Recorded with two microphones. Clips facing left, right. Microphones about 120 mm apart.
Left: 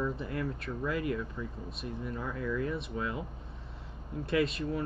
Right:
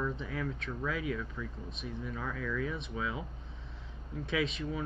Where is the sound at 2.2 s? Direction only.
20° left (ahead or behind).